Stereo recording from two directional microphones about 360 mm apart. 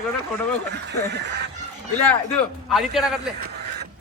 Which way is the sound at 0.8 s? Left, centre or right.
Right.